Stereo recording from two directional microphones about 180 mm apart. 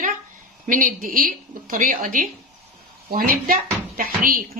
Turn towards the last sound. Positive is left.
turn(degrees=-50)  # may be behind; listen again after turning